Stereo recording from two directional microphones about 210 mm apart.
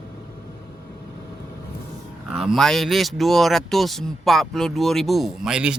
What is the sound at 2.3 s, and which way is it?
Speech, centre (ahead or behind).